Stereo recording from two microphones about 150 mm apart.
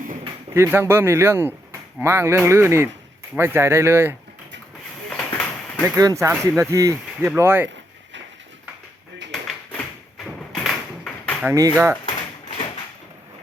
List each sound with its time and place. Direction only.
0.5 s speech: 15° right (ahead or behind)
5.0 s a sound: 5° left (ahead or behind)
6.0 s speech: 20° right (ahead or behind)
10.2 s thump: centre (ahead or behind)
11.4 s speech: 20° right (ahead or behind)
12.0 s a sound: 35° left (ahead or behind)